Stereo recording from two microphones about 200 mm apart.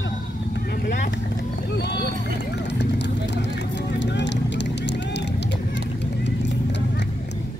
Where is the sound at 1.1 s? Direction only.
60° left (ahead or behind).